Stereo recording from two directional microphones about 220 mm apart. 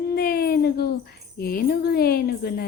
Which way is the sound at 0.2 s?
45° left (ahead or behind).